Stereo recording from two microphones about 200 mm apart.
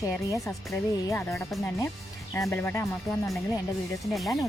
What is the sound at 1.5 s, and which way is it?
Speech, centre (ahead or behind).